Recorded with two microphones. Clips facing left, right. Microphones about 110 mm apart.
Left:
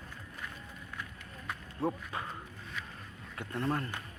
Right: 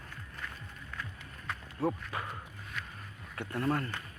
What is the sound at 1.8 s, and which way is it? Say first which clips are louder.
Speech: right 1 dB; 25° left (ahead or behind).